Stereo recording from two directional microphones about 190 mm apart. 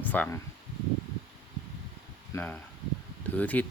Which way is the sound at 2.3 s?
10° left (ahead or behind).